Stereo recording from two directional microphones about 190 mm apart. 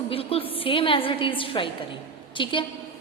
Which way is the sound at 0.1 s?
30° left (ahead or behind).